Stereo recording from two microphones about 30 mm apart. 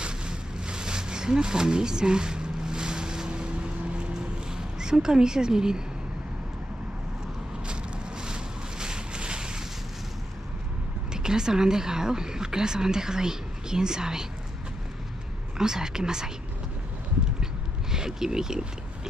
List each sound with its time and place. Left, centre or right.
0.0 s a sound: right
3.3 s vehicle: right
4.5 s speech: right
8.2 s a sound: right
11.1 s a woman's voice: right
15.5 s a woman's voice: right
17.9 s a woman's voice: right